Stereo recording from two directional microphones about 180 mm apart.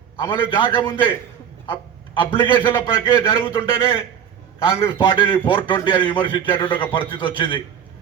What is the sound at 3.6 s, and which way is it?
A man's voice, 30° left (ahead or behind).